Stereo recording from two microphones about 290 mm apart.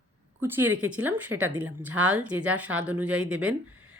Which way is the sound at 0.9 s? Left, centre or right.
Centre.